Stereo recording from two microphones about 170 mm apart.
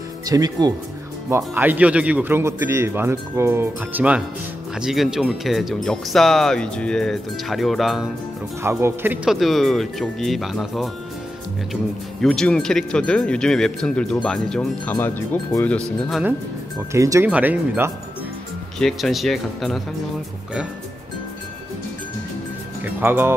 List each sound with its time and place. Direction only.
0.3 s speech: 25° right (ahead or behind)
1.3 s speech: 10° right (ahead or behind)
8.6 s speech: 15° right (ahead or behind); by 16.2 s 10° left (ahead or behind)
16.9 s speech: 15° right (ahead or behind)
18.8 s speech: centre (ahead or behind)
22.8 s speech: 10° right (ahead or behind)